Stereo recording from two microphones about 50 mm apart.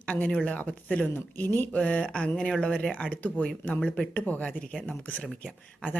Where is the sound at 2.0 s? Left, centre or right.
Centre.